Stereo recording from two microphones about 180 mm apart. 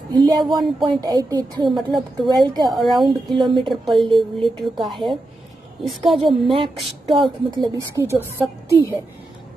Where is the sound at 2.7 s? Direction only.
Centre (ahead or behind).